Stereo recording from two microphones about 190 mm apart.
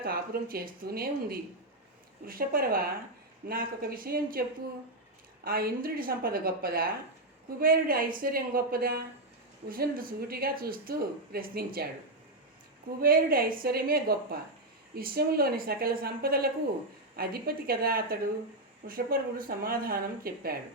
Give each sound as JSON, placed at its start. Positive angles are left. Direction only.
{"t": 0.0, "sound": "speech", "side_deg": -50}
{"t": 5.5, "sound": "speech", "side_deg": -50}
{"t": 13.0, "sound": "speech", "side_deg": -50}